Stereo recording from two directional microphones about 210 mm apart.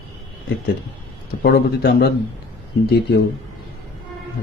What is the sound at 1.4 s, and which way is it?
Speech, 45° left (ahead or behind).